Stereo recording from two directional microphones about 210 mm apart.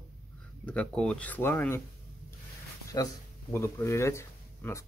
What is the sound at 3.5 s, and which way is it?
Speech, 15° left (ahead or behind).